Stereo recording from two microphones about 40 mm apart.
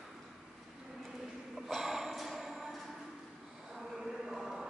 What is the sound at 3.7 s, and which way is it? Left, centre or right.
Chant, centre.